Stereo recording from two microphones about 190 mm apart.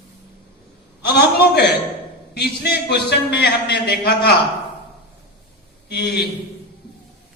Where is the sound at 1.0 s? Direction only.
55° left (ahead or behind).